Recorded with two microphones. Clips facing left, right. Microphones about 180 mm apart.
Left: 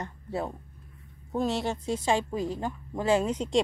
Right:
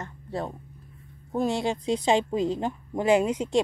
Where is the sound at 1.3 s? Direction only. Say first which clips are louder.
Right 2 dB; 10° right (ahead or behind).